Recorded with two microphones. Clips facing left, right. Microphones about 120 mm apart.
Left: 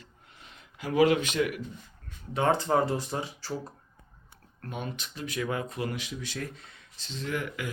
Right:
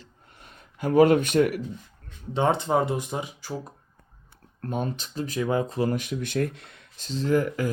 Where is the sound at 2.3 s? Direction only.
20° right (ahead or behind).